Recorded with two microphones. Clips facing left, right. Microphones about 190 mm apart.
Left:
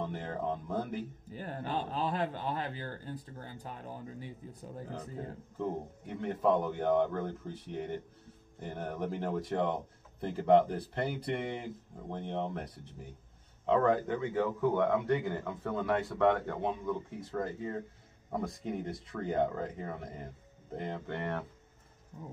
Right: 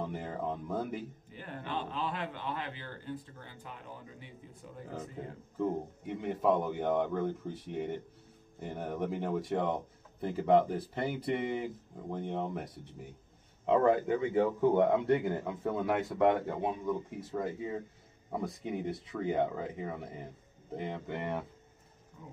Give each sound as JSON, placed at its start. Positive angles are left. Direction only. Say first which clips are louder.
{"t": 0.0, "sound": "speech", "louder": "even", "side_deg": -5}
{"t": 1.3, "sound": "speech", "louder": "left 3 dB", "side_deg": 40}
{"t": 6.0, "sound": "speech", "louder": "even", "side_deg": -5}
{"t": 14.3, "sound": "a man's voice", "louder": "right 3 dB", "side_deg": -25}
{"t": 15.4, "sound": "speech", "louder": "right 1 dB", "side_deg": -10}